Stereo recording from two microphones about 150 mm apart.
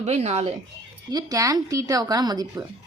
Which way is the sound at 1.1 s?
25° right (ahead or behind).